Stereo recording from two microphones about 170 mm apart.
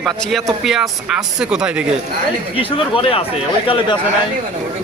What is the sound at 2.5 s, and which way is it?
Speech, 30° left (ahead or behind).